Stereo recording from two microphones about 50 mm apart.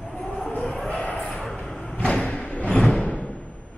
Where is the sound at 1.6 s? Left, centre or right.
Left.